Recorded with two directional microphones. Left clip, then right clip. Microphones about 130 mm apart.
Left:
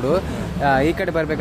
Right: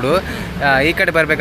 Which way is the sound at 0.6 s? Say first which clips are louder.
Right 4 dB; 20° left (ahead or behind).